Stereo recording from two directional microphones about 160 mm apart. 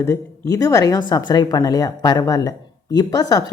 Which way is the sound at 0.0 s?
20° left (ahead or behind).